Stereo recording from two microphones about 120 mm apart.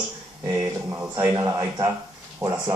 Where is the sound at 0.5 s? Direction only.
25° right (ahead or behind).